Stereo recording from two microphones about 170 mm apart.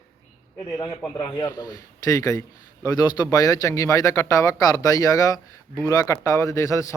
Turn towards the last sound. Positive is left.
turn(degrees=15)  # may be behind; listen again after turning